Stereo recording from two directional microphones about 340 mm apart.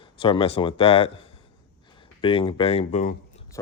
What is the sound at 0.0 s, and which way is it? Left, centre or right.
Speech, centre.